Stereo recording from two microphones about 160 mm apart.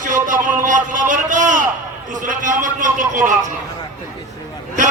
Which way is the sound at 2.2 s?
55° right (ahead or behind).